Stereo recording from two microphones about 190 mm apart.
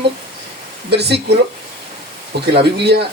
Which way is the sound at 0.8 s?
60° right (ahead or behind).